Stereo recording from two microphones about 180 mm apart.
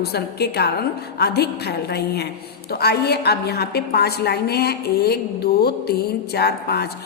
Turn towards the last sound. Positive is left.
turn(degrees=65)  # may be behind; listen again after turning